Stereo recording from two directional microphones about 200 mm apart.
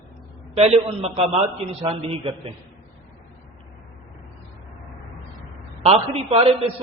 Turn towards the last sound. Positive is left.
turn(degrees=-30)  # may be behind; listen again after turning